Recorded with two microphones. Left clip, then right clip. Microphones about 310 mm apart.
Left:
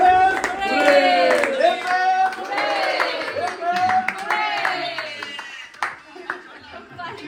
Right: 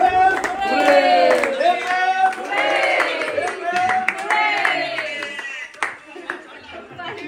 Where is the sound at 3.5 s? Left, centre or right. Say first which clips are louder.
Left 2 dB; centre.